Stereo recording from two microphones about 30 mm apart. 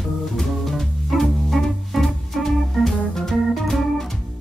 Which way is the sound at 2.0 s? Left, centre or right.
Centre.